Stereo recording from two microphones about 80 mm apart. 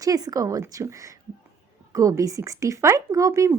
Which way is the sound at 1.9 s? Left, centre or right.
Right.